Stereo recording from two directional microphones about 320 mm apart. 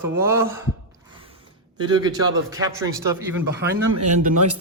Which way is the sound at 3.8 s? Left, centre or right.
Right.